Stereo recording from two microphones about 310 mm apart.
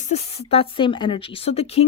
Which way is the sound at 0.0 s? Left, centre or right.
Centre.